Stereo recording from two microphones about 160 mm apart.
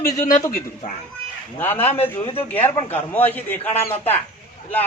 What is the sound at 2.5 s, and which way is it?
A man's voice, 10° left (ahead or behind).